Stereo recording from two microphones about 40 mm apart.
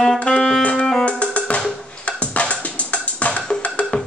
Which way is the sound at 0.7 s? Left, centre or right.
Centre.